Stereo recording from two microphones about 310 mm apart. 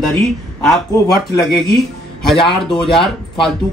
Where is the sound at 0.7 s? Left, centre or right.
Centre.